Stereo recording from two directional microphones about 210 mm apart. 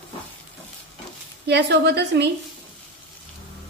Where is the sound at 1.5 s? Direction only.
55° right (ahead or behind).